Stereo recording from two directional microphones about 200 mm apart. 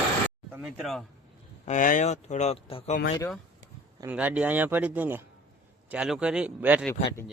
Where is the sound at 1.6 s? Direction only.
40° left (ahead or behind).